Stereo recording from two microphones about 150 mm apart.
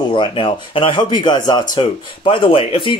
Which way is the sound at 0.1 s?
35° left (ahead or behind).